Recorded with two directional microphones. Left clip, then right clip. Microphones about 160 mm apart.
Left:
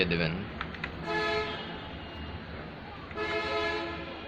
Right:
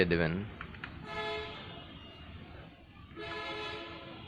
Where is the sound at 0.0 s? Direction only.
50° right (ahead or behind).